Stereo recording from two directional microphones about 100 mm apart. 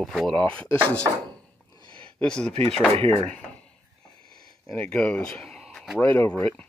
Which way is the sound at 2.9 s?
85° right.